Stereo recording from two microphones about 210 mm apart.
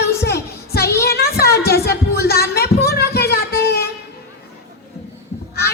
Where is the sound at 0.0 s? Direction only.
50° left (ahead or behind).